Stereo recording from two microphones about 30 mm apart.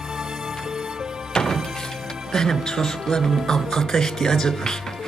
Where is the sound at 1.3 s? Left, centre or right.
Left.